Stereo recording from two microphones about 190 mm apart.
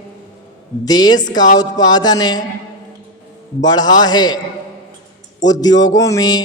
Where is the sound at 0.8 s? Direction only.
20° left (ahead or behind).